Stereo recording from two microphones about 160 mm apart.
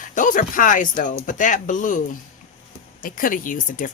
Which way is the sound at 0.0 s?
55° left (ahead or behind).